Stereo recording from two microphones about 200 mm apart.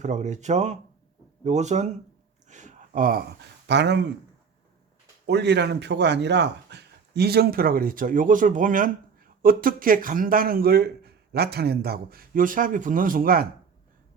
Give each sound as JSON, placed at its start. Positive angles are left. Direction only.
{"t": 0.0, "sound": "speech", "side_deg": -35}
{"t": 2.5, "sound": "a sound", "side_deg": -35}
{"t": 3.7, "sound": "speech", "side_deg": -60}
{"t": 5.2, "sound": "speech", "side_deg": -55}